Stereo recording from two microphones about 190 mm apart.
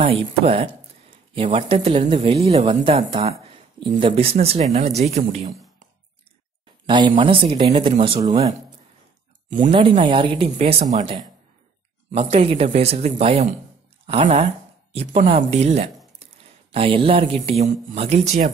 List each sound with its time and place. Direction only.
0.0 s speech: 30° right (ahead or behind)
6.9 s speech: 25° right (ahead or behind)
9.7 s speech: 30° right (ahead or behind)